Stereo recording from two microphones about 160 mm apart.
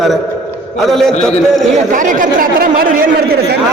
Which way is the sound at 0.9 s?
Centre (ahead or behind).